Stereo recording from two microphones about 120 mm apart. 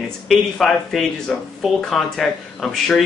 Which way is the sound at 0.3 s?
Centre (ahead or behind).